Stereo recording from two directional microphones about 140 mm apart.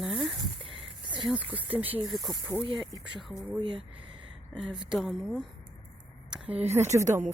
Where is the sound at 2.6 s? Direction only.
35° right (ahead or behind).